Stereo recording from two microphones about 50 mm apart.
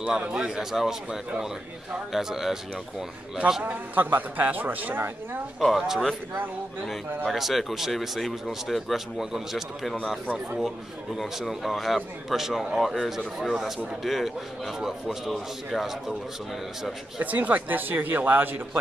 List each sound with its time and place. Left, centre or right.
0.3 s speech: centre
3.6 s a woman's voice: right
5.6 s speech: centre
7.2 s speech: centre
11.1 s speech: centre
17.2 s a woman's voice: right